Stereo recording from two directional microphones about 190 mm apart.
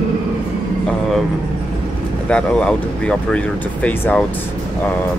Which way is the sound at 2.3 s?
5° left (ahead or behind).